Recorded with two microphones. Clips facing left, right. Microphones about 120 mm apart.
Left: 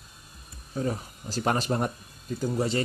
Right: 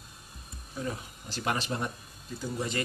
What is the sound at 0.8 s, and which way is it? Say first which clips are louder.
Speech: left 6 dB; 35° left (ahead or behind).